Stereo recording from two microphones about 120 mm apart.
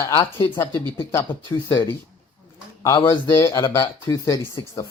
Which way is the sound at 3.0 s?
20° left (ahead or behind).